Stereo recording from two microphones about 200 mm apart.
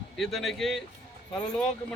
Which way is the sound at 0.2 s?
Centre (ahead or behind).